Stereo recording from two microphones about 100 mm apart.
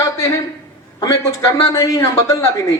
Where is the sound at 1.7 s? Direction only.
35° left (ahead or behind).